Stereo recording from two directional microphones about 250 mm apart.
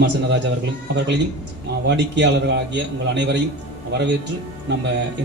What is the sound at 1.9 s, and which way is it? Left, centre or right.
A man's voice, right.